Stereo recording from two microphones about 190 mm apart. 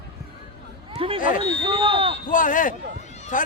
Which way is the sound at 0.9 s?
30° right (ahead or behind).